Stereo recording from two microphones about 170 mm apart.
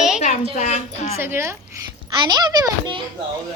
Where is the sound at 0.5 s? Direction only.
40° left (ahead or behind).